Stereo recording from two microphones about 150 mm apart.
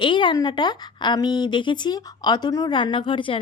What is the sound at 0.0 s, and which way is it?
A woman's voice, 35° left (ahead or behind).